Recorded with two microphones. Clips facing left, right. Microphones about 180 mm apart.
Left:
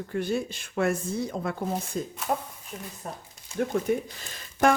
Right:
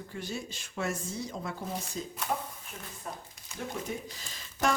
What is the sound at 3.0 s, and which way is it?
Speech, 40° left (ahead or behind).